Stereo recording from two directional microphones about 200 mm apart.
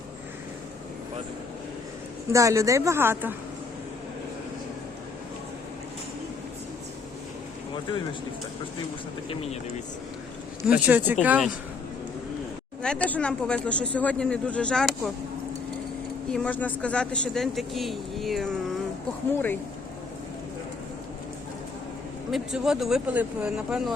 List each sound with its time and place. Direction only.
2.3 s a woman's voice: 15° right (ahead or behind)
9.3 s speech: 30° left (ahead or behind)
10.6 s a woman's voice: 5° right (ahead or behind)
12.8 s speech: 5° left (ahead or behind)
16.3 s speech: 5° left (ahead or behind)
22.3 s speech: 5° right (ahead or behind)